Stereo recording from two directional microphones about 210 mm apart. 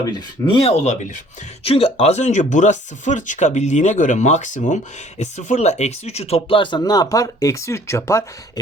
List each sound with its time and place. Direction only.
0.0 s speech: 25° left (ahead or behind)